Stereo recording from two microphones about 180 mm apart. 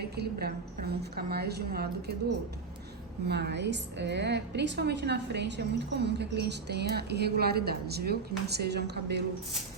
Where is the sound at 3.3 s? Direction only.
70° right (ahead or behind).